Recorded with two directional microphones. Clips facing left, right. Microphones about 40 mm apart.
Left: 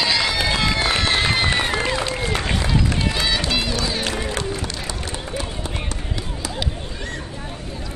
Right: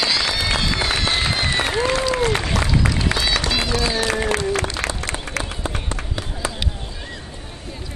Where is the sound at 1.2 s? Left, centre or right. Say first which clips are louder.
Left 2 dB; centre.